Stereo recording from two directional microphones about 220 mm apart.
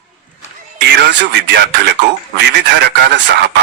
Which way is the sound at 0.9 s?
50° right (ahead or behind).